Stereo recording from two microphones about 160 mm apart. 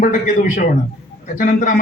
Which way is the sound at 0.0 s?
55° left (ahead or behind).